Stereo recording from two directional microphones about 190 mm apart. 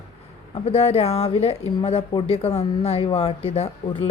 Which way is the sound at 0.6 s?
30° left (ahead or behind).